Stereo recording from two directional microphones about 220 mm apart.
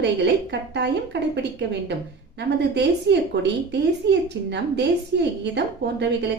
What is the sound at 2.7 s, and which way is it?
A woman's voice, 50° right (ahead or behind).